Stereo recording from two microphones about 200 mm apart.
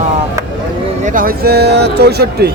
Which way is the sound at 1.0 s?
45° right (ahead or behind).